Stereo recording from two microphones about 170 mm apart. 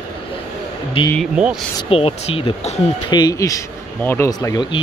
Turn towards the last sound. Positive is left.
turn(degrees=25)  # may be behind; listen again after turning